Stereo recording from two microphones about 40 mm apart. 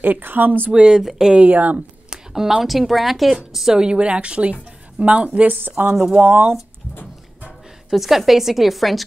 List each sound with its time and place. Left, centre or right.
0.0 s speech: right
0.7 s a woman's voice: right
1.0 s speech: centre
1.4 s speech: right
2.3 s a woman's voice: centre; by 5.6 s right
5.6 s speech: right
7.9 s a woman's voice: centre